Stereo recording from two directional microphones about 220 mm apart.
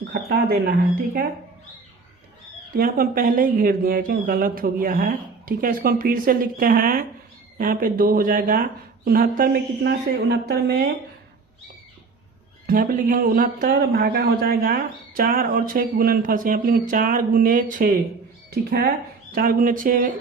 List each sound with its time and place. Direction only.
0.0 s speech: 45° right (ahead or behind)
2.7 s a man's voice: 40° right (ahead or behind)
12.6 s a man's voice: 40° right (ahead or behind)